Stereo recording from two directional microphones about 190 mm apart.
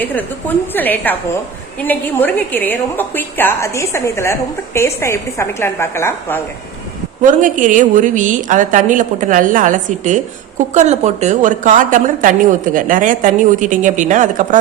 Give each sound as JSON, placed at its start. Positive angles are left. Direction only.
{"t": 0.0, "sound": "a woman's voice", "side_deg": 10}
{"t": 7.2, "sound": "a woman's voice", "side_deg": -40}